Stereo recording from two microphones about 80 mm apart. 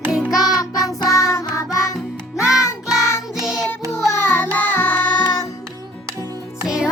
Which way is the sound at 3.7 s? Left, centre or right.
Left.